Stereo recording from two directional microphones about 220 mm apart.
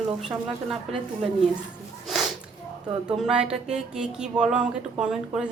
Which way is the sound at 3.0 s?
5° right (ahead or behind).